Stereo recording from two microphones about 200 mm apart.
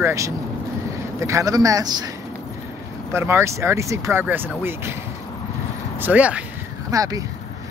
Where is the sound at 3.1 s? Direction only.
15° right (ahead or behind).